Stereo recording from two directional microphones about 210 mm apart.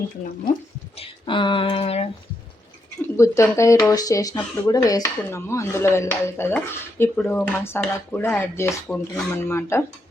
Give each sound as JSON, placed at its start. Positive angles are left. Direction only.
{"t": 0.9, "sound": "speech", "side_deg": 25}
{"t": 3.2, "sound": "speech", "side_deg": 15}